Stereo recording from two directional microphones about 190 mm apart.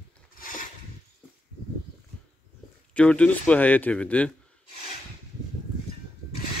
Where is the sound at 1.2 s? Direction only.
5° right (ahead or behind).